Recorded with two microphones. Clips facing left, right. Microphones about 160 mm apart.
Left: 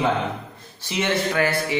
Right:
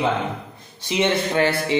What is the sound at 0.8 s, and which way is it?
Speech, 20° right (ahead or behind).